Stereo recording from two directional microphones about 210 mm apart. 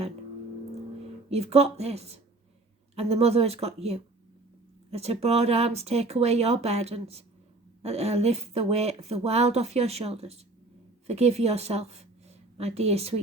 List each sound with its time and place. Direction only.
1.3 s a woman's voice: 30° right (ahead or behind)